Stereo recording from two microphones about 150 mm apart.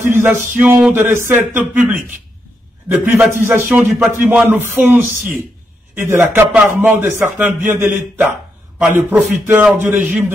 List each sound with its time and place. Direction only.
0.0 s speech: 15° right (ahead or behind)
3.3 s speech: 15° right (ahead or behind)